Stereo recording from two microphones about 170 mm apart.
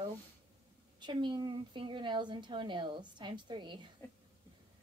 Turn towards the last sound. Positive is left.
turn(degrees=-25)  # may be behind; listen again after turning